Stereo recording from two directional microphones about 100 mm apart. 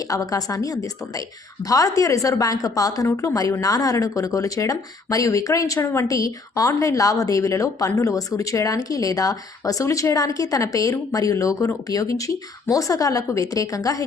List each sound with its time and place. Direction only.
0.1 s speech: 35° left (ahead or behind)